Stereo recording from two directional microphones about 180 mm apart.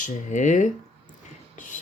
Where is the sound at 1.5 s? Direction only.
45° left (ahead or behind).